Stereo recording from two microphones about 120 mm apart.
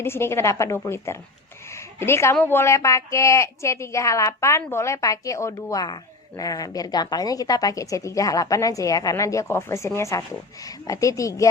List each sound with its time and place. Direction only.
0.0 s speech: 20° left (ahead or behind)
1.7 s a sound: 20° left (ahead or behind)
2.4 s speech: 20° left (ahead or behind)